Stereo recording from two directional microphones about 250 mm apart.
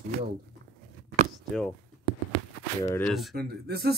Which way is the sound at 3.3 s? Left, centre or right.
Right.